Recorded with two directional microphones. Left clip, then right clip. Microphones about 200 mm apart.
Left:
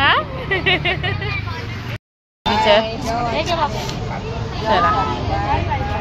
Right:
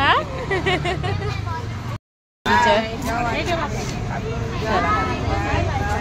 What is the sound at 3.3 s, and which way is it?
Speech, 30° right (ahead or behind).